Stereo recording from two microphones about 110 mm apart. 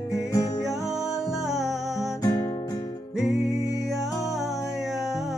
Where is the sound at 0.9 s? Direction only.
5° right (ahead or behind).